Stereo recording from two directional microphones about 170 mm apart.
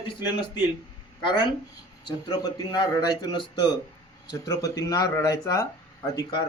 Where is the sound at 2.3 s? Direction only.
25° left (ahead or behind).